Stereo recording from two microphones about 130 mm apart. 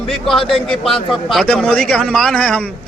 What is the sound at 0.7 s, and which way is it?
A man's voice, 5° left (ahead or behind).